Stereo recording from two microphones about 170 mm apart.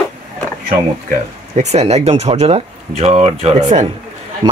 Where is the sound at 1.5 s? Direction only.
40° right (ahead or behind).